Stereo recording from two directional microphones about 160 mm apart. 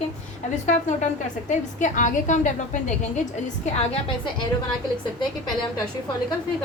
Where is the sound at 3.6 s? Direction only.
35° left (ahead or behind).